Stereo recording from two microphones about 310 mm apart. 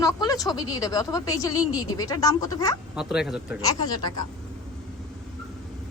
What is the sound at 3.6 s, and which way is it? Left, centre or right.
Speech, centre.